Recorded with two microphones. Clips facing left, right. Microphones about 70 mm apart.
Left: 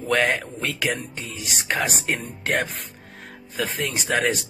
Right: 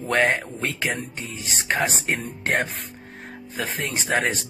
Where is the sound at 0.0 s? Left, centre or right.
Right.